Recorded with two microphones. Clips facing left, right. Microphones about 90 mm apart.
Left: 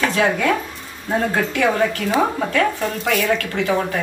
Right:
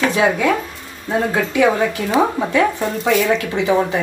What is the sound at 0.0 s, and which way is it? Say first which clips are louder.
Speech: right 2 dB; 10° right (ahead or behind).